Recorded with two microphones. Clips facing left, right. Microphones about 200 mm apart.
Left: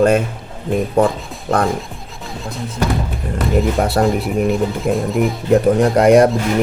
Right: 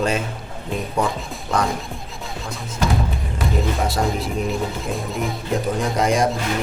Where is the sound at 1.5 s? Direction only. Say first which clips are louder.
Left 5 dB; 55° left (ahead or behind).